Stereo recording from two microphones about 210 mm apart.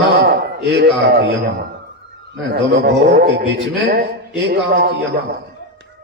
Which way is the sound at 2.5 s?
55° right (ahead or behind).